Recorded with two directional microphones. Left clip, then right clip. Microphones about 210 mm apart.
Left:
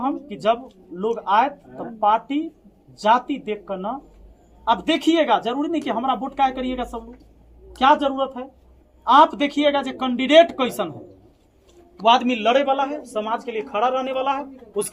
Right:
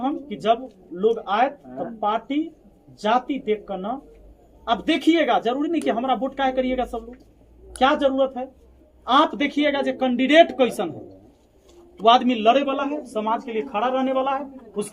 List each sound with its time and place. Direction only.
0.0 s a sound: 20° left (ahead or behind)
0.9 s speech: 25° left (ahead or behind)
12.0 s a man's voice: 35° left (ahead or behind)